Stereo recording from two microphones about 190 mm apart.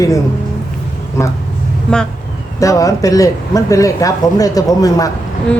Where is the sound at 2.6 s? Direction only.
15° left (ahead or behind).